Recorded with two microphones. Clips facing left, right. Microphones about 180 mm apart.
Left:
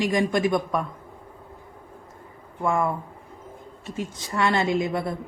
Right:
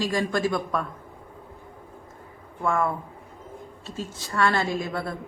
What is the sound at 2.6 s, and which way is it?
Speech, 15° left (ahead or behind).